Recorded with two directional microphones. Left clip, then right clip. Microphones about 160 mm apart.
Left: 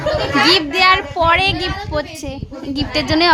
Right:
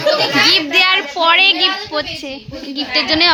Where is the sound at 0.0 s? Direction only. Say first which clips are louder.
Right 2 dB; 15° left (ahead or behind).